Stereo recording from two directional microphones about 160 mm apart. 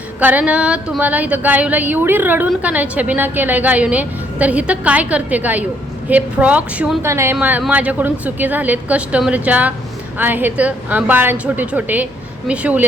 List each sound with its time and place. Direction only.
0.2 s a woman's voice: 10° right (ahead or behind)
7.0 s a woman's voice: 15° right (ahead or behind)